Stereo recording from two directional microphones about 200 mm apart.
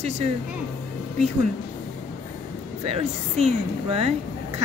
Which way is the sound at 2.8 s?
30° right (ahead or behind).